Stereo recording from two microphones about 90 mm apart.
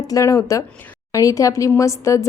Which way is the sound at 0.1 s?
35° left (ahead or behind).